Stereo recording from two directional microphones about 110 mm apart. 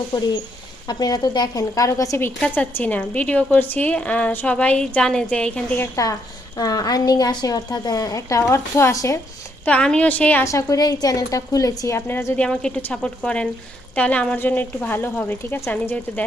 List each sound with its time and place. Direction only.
0.9 s a woman's voice: 35° left (ahead or behind)
2.4 s a woman's voice: 15° left (ahead or behind)
5.8 s a woman's voice: 30° left (ahead or behind)
9.6 s a woman's voice: 10° left (ahead or behind)
10.4 s a woman's voice: 30° left (ahead or behind)
12.4 s a woman's voice: 10° left (ahead or behind)